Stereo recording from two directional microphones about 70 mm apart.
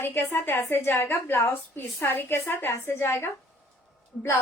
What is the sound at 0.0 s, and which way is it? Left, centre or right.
A woman's voice, left.